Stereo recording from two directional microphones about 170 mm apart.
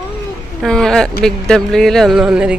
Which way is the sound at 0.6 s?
5° left (ahead or behind).